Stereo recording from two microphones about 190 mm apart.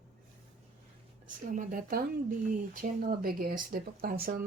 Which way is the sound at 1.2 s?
45° right (ahead or behind).